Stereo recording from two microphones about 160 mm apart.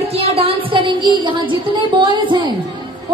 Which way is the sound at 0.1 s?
40° right (ahead or behind).